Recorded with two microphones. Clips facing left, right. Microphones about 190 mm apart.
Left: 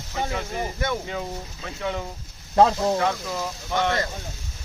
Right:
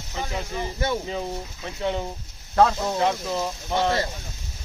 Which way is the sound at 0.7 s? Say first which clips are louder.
Right 4 dB; 30° right (ahead or behind).